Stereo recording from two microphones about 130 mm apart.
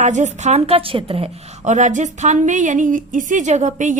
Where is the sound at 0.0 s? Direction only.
65° right (ahead or behind); by 1.7 s 50° right (ahead or behind).